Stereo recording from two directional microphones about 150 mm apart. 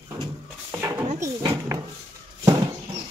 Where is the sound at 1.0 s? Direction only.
50° right (ahead or behind).